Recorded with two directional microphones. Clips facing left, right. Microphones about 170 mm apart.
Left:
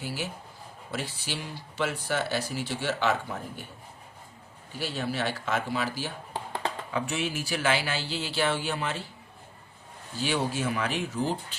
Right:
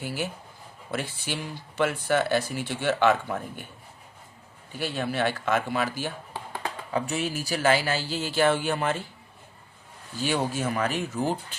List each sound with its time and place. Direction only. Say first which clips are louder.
0.0 s speech: right 3 dB; 55° right (ahead or behind)
4.8 s speech: right 3 dB; 55° right (ahead or behind)
6.9 s speech: right 4 dB; 40° right (ahead or behind)
10.2 s speech: right 2 dB; 45° right (ahead or behind)